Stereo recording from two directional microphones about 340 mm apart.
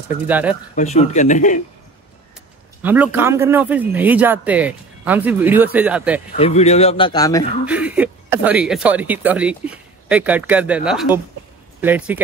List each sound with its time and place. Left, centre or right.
0.3 s speech: centre
0.7 s speech: centre
2.8 s speech: centre
6.3 s a man's voice: centre
7.6 s speech: centre